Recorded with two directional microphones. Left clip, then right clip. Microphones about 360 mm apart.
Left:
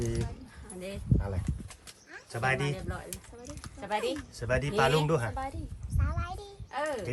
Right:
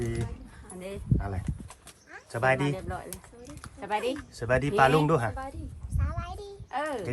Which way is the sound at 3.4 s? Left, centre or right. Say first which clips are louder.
Even; centre.